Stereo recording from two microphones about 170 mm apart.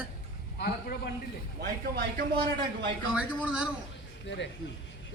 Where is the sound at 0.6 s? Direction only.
65° left (ahead or behind).